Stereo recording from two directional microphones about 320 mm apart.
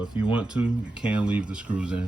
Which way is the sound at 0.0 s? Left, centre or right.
Centre.